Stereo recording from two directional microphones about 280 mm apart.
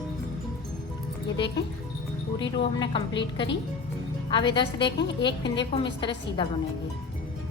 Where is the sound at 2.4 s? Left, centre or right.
Centre.